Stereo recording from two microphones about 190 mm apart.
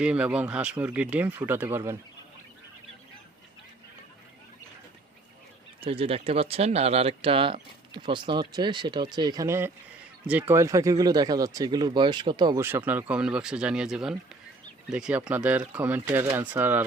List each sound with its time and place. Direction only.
0.0 s speech: 5° right (ahead or behind)
5.8 s speech: 30° right (ahead or behind)
12.5 s speech: 10° right (ahead or behind)